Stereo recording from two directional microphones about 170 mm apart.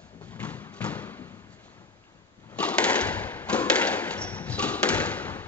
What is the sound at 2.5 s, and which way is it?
Thump, 5° left (ahead or behind).